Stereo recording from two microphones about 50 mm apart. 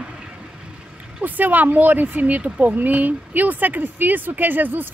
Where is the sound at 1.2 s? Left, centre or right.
Right.